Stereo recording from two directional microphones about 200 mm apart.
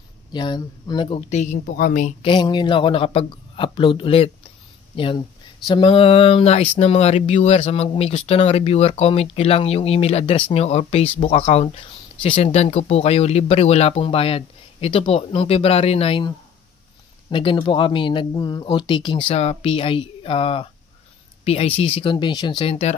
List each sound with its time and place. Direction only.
0.3 s speech: 20° left (ahead or behind); by 2.1 s 40° left (ahead or behind)
2.2 s speech: 25° left (ahead or behind)